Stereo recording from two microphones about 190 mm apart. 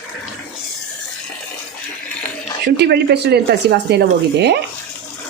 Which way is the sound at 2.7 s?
60° right (ahead or behind).